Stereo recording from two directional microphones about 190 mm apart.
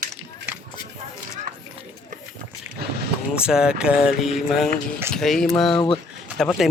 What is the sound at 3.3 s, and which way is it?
Speech, 5° right (ahead or behind).